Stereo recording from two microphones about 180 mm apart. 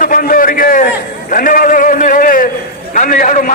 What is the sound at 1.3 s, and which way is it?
A man's voice, 50° left (ahead or behind).